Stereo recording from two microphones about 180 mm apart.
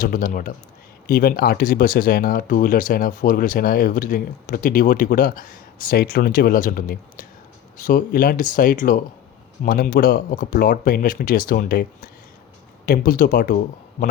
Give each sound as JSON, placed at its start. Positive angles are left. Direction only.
{"t": 0.0, "sound": "speech", "side_deg": 50}